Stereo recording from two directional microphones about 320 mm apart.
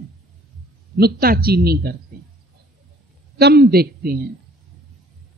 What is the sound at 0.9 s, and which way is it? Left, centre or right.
Speech, right.